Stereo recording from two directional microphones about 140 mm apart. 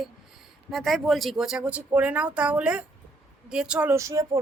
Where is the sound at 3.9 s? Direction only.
20° right (ahead or behind).